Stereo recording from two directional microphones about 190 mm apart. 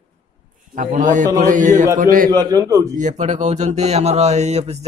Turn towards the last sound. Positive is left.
turn(degrees=-35)  # may be behind; listen again after turning